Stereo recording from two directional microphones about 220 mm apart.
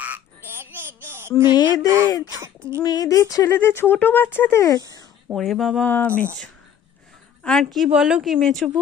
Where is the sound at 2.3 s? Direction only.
15° right (ahead or behind).